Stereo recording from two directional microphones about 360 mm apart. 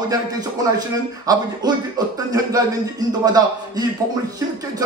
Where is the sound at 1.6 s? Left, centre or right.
Centre.